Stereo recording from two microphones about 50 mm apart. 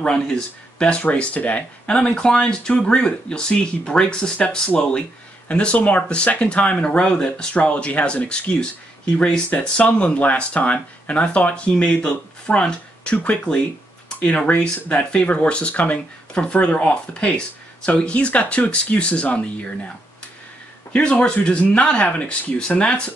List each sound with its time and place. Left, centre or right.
0.0 s speech: centre
5.5 s speech: left
9.5 s speech: left
20.9 s speech: left